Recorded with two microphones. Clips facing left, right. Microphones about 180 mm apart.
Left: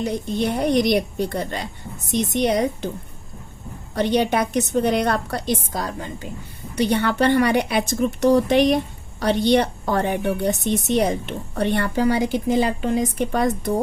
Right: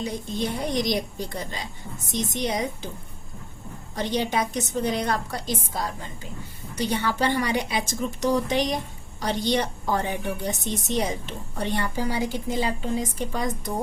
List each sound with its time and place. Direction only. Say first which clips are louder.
0.0 s a woman's voice: left 6 dB; 65° left (ahead or behind)
3.9 s a woman's voice: left 6 dB; 65° left (ahead or behind)